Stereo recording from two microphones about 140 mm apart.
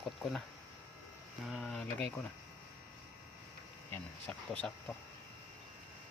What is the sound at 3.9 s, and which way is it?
Speech, 10° left (ahead or behind).